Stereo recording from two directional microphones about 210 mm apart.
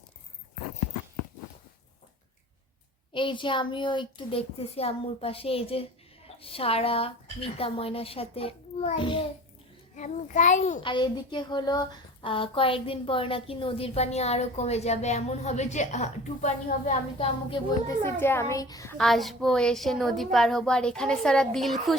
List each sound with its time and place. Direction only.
3.1 s a woman's voice: 25° left (ahead or behind)
9.9 s a child's voice: 35° left (ahead or behind)
10.8 s a woman's voice: 20° left (ahead or behind)
18.0 s a child's voice: 10° left (ahead or behind)
18.9 s a woman's voice: centre (ahead or behind)